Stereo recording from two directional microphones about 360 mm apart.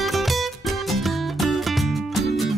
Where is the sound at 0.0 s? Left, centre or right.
Centre.